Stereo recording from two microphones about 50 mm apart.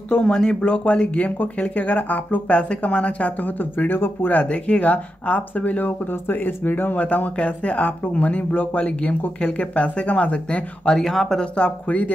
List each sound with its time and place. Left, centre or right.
0.1 s speech: centre; by 4.4 s left
4.4 s speech: left
7.0 s speech: left
11.0 s speech: centre
11.5 s speech: left